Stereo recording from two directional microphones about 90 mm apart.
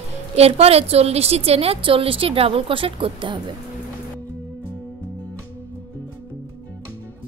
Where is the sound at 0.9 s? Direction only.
90° right; by 3.4 s 75° right (ahead or behind).